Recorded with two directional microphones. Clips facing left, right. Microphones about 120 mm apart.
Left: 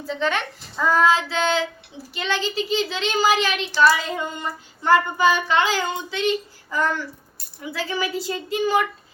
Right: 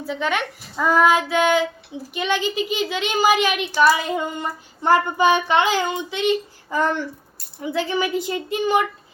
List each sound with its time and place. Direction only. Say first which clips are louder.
0.0 s a child's voice: right 1 dB; 10° right (ahead or behind)